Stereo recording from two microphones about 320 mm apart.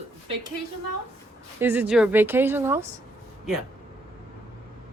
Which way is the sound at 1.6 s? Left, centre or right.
Centre.